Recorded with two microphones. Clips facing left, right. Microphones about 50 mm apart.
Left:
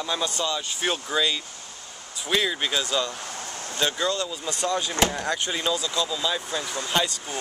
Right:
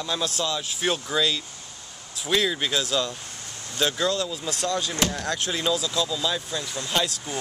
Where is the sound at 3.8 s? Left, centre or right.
Centre.